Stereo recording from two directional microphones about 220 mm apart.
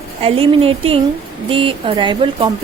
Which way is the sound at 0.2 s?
25° right (ahead or behind).